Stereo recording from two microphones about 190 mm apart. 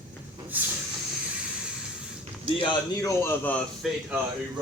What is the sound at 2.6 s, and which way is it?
A man's voice, 15° left (ahead or behind).